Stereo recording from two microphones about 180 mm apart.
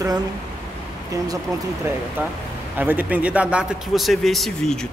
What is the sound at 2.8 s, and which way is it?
A man's voice, 10° right (ahead or behind).